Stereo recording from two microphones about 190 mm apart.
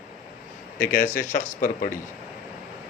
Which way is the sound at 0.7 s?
45° left (ahead or behind).